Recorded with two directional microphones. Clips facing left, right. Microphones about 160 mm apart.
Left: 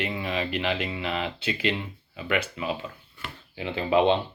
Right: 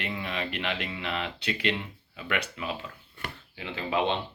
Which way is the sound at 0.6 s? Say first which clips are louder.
Left 5 dB; 30° left (ahead or behind).